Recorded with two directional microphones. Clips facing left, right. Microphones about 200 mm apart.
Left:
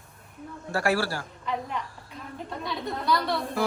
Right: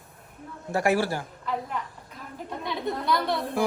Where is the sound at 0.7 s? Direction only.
20° right (ahead or behind).